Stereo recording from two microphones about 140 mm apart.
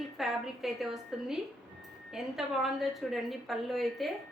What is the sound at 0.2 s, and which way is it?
A woman's voice, centre (ahead or behind).